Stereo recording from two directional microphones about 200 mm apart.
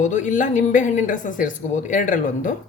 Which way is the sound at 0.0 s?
40° left (ahead or behind).